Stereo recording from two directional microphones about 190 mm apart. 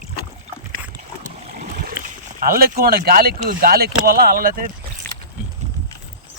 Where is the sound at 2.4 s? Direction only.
50° right (ahead or behind).